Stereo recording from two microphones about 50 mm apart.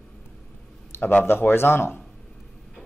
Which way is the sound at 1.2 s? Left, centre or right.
Left.